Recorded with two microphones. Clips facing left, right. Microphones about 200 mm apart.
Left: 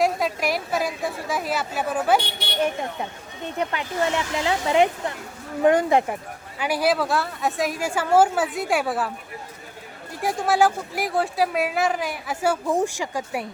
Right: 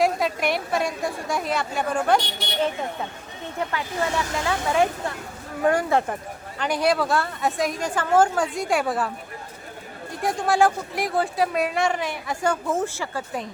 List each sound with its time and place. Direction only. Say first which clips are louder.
0.0 s speech: even; centre (ahead or behind); by 6.1 s 15° left (ahead or behind)
6.6 s speech: even; 5° left (ahead or behind)